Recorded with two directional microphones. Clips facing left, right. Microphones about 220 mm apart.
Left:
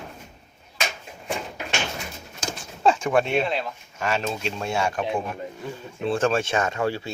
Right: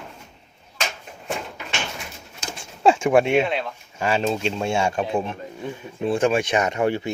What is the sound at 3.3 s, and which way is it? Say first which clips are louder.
Speech: right 3 dB; 5° right (ahead or behind).